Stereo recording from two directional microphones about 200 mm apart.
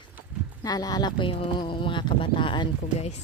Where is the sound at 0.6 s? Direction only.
20° left (ahead or behind).